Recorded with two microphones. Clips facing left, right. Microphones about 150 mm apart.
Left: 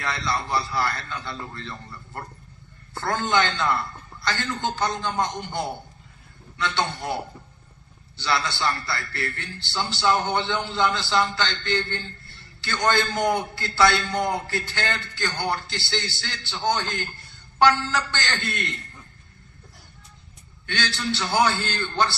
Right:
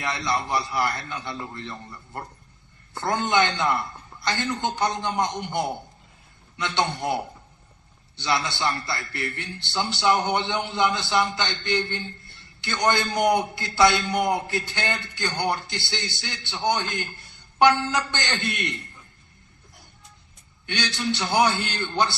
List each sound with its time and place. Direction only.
0.0 s a man's voice: 20° right (ahead or behind)
20.7 s a man's voice: 20° right (ahead or behind)